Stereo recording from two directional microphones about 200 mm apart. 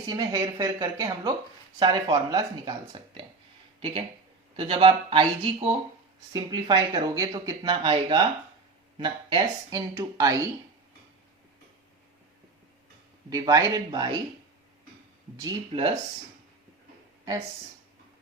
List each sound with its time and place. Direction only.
0.1 s speech: 20° right (ahead or behind)
13.3 s speech: 20° right (ahead or behind)
15.4 s speech: 25° right (ahead or behind)